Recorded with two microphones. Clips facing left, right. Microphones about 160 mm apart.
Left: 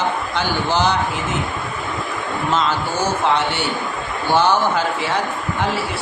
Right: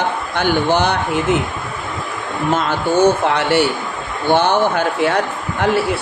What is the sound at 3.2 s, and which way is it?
Speech, 65° right (ahead or behind).